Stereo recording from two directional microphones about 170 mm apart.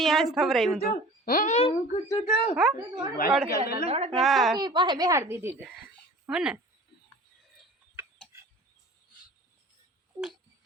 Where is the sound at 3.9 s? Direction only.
35° right (ahead or behind).